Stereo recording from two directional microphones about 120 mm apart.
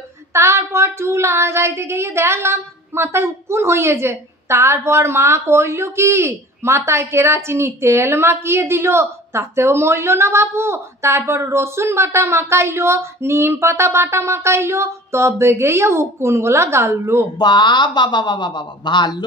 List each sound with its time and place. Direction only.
0.3 s child singing: 25° right (ahead or behind)
17.4 s a woman's voice: 40° left (ahead or behind)